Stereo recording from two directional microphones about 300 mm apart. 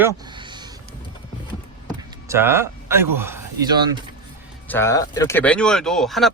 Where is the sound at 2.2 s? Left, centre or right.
Centre.